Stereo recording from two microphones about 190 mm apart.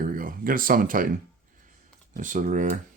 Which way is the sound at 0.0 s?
45° right (ahead or behind).